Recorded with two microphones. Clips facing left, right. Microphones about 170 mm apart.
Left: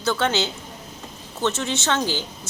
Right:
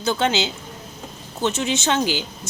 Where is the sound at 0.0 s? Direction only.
15° right (ahead or behind).